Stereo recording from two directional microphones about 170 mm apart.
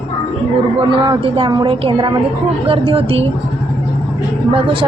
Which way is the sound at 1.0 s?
30° right (ahead or behind).